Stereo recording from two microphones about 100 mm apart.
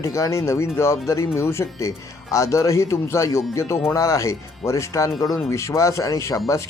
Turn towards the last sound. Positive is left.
turn(degrees=30)  # may be behind; listen again after turning